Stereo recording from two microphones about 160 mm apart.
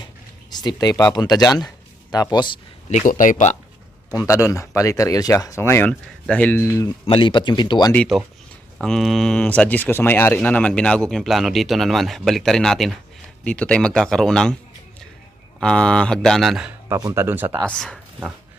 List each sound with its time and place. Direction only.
0.5 s speech: 25° left (ahead or behind)
2.9 s speech: 60° left (ahead or behind)
4.1 s speech: 20° left (ahead or behind)
7.0 s speech: 30° left (ahead or behind)
7.9 s speech: 5° left (ahead or behind)
15.6 s speech: 5° left (ahead or behind)
16.9 s speech: 20° right (ahead or behind)
17.6 s speech: 5° left (ahead or behind)